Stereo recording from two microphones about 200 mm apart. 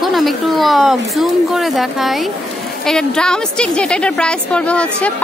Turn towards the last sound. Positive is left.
turn(degrees=5)  # may be behind; listen again after turning